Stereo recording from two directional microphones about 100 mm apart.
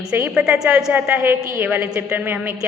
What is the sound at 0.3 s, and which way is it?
Speech, 10° right (ahead or behind).